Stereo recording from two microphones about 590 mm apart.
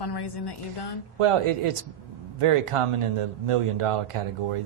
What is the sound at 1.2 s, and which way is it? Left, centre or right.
Speech, right.